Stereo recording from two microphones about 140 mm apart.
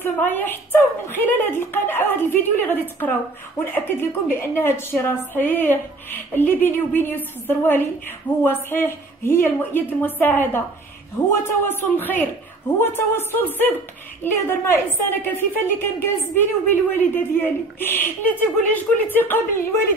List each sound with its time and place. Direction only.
0.0 s a woman's voice: 15° left (ahead or behind)
4.4 s a woman's voice: 15° left (ahead or behind)